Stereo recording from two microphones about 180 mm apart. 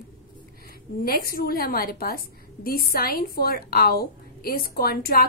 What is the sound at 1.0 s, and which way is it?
A woman's voice, 55° left (ahead or behind).